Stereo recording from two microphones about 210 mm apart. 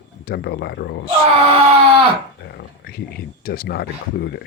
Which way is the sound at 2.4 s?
50° left (ahead or behind).